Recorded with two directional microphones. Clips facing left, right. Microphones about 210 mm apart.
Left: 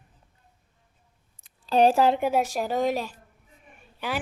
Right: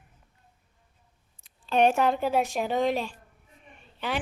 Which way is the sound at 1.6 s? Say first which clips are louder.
Left 3 dB; 35° left (ahead or behind).